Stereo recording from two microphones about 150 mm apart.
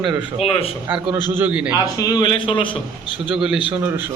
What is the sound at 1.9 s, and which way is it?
Speech, 25° left (ahead or behind).